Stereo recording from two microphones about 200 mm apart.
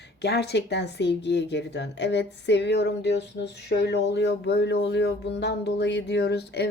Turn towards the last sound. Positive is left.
turn(degrees=55)  # may be behind; listen again after turning